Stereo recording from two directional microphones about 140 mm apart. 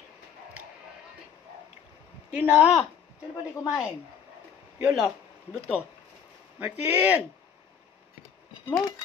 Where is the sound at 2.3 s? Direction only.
10° right (ahead or behind).